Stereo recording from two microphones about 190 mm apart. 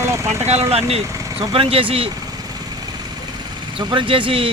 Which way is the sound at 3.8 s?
25° right (ahead or behind).